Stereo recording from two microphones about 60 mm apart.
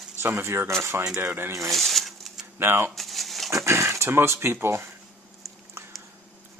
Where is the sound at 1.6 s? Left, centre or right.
Centre.